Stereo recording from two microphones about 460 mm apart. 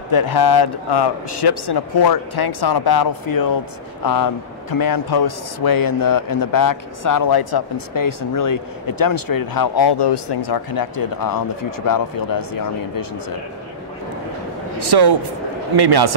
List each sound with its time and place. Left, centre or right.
0.1 s speech: left
14.9 s a man's voice: right